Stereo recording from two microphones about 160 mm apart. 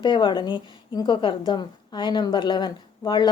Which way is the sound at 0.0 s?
30° left (ahead or behind).